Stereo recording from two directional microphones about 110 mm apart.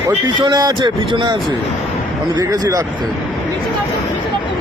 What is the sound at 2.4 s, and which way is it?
Speech, 35° right (ahead or behind).